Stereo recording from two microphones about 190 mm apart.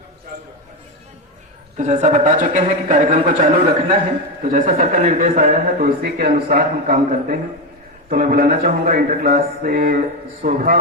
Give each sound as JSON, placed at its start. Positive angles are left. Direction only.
{"t": 1.7, "sound": "a man's voice", "side_deg": -40}